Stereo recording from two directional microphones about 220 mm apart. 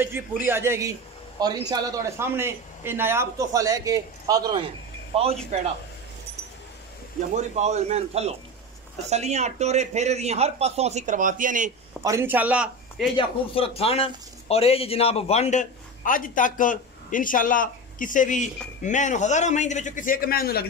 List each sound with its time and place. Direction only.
0.4 s a man's voice: 10° right (ahead or behind); by 5.4 s 25° right (ahead or behind)
7.2 s a man's voice: 30° right (ahead or behind)
12.0 s speech: 10° right (ahead or behind)
13.2 s speech: 25° left (ahead or behind); by 20.6 s 45° left (ahead or behind)